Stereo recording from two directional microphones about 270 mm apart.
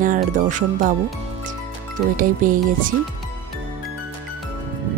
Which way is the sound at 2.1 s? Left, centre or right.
Right.